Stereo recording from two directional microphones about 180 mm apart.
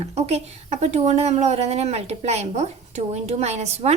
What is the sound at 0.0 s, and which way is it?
Speech, 35° right (ahead or behind).